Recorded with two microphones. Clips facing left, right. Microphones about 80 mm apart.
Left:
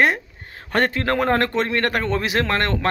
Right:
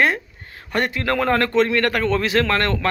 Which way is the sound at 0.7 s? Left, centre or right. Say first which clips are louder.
Left 1 dB; left.